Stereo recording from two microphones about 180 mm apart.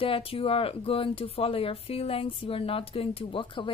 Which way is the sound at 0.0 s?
30° left (ahead or behind).